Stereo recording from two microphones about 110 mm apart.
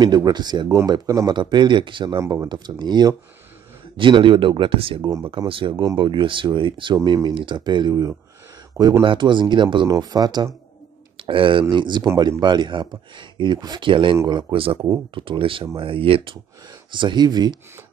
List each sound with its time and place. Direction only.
0.0 s speech: 40° right (ahead or behind)
2.1 s speech: 30° right (ahead or behind)
2.4 s speech: 40° right (ahead or behind)
9.8 s speech: 35° right (ahead or behind)
11.1 s speech: 50° right (ahead or behind)
16.9 s speech: 45° right (ahead or behind)